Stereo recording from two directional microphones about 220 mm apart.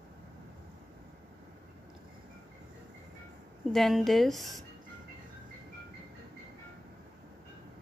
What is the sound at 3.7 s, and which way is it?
Speech, centre (ahead or behind).